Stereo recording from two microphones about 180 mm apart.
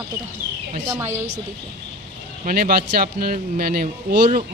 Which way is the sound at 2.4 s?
55° right (ahead or behind).